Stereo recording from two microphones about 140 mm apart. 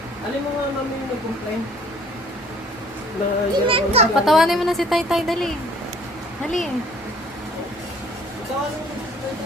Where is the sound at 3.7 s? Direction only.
45° right (ahead or behind).